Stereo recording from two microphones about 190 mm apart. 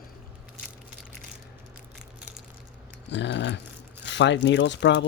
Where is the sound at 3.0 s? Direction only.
65° left (ahead or behind).